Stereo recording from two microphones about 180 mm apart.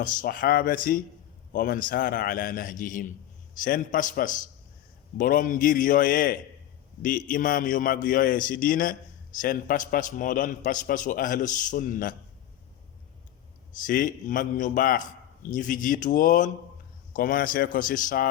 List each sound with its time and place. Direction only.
0.0 s a man's voice: 50° left (ahead or behind)
13.8 s a man's voice: 50° left (ahead or behind)